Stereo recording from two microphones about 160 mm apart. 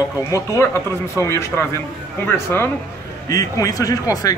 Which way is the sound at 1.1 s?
15° left (ahead or behind).